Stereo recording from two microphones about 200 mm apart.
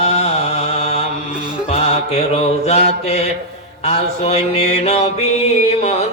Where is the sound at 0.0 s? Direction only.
35° left (ahead or behind).